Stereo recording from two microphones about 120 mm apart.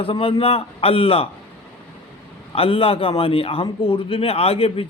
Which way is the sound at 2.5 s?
50° left (ahead or behind).